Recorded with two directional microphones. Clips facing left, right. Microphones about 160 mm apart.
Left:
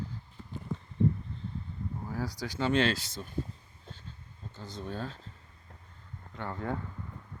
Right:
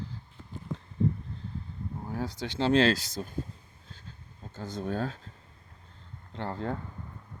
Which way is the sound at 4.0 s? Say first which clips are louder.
Right 1 dB; 45° right (ahead or behind).